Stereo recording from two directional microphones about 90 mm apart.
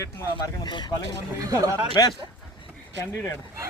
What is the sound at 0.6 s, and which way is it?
Speech, 55° left (ahead or behind).